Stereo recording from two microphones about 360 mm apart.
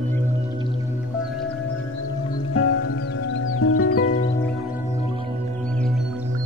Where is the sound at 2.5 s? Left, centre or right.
Left.